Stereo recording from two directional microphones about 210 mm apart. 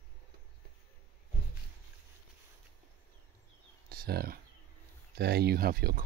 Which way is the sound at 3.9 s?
50° right (ahead or behind).